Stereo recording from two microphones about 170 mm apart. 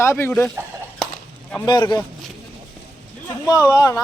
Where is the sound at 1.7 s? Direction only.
25° left (ahead or behind).